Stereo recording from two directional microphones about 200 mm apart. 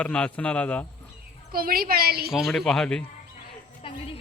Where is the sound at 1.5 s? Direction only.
45° right (ahead or behind).